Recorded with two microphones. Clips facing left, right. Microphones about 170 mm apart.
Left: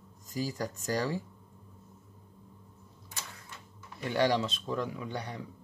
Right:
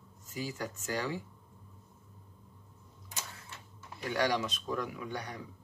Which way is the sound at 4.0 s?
25° left (ahead or behind).